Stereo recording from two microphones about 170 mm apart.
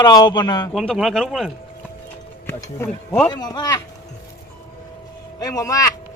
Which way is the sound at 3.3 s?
25° left (ahead or behind).